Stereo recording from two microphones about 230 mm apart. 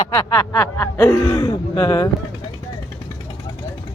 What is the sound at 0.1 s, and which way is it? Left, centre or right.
Speech, centre.